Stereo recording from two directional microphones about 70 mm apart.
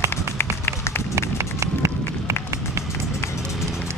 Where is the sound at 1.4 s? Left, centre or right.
Right.